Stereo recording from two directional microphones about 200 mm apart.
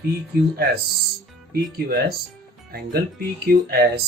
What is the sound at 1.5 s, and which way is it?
Speech, 50° right (ahead or behind).